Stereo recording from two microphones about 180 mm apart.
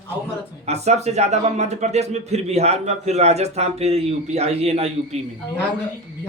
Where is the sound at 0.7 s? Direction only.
40° right (ahead or behind).